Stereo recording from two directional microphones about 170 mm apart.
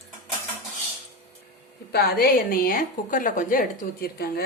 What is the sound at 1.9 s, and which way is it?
A woman's voice, 65° left (ahead or behind).